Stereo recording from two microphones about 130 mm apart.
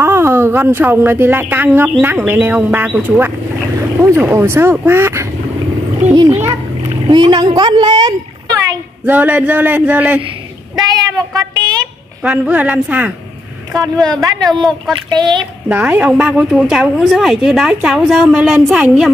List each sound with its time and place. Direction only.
0.0 s a woman's voice: 20° right (ahead or behind)
7.1 s speech: 35° right (ahead or behind)
9.0 s a woman's voice: 15° right (ahead or behind)
10.8 s a sound: 30° right (ahead or behind)
12.2 s a woman's voice: 10° right (ahead or behind)
14.1 s speech: 30° right (ahead or behind)
14.5 s a woman's voice: 5° left (ahead or behind)
14.9 s speech: 35° right (ahead or behind)
15.7 s a woman's voice: 10° right (ahead or behind)